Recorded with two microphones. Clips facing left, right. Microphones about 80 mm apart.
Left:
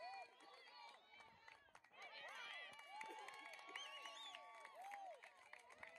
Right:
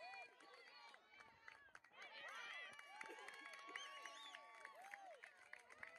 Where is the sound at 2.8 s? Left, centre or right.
Centre.